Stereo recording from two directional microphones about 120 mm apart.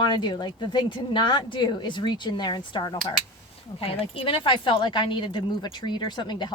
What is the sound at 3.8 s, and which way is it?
Speech, 50° left (ahead or behind).